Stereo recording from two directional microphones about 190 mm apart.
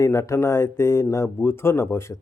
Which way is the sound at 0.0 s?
15° left (ahead or behind).